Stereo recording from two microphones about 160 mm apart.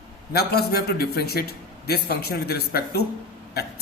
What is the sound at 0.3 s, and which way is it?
A man's voice, 75° left (ahead or behind).